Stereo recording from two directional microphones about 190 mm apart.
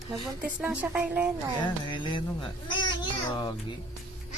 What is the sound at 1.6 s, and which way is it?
Speech, 25° left (ahead or behind).